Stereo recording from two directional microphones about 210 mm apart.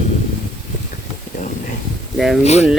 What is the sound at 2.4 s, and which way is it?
Speech, 30° left (ahead or behind).